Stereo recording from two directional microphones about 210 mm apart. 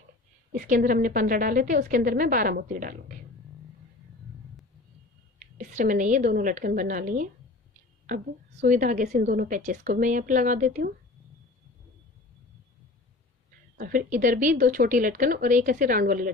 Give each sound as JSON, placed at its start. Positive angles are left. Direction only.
{"t": 0.5, "sound": "a woman's voice", "side_deg": -40}
{"t": 5.6, "sound": "a woman's voice", "side_deg": -35}
{"t": 8.6, "sound": "a woman's voice", "side_deg": -35}
{"t": 13.7, "sound": "a woman's voice", "side_deg": -40}